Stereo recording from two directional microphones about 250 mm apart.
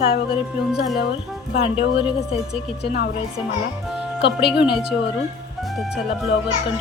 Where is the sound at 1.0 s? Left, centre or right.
Left.